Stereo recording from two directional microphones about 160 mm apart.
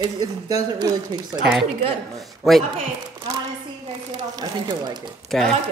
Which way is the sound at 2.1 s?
Centre (ahead or behind).